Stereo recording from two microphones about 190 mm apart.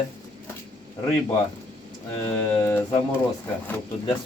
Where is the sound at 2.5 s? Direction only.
15° left (ahead or behind).